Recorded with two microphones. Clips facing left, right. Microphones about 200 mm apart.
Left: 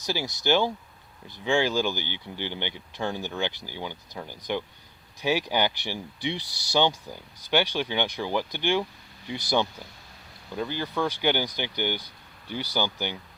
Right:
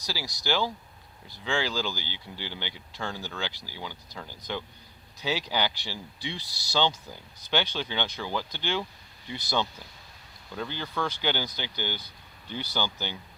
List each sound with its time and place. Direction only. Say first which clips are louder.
0.0 s speech: left 6 dB; 20° left (ahead or behind)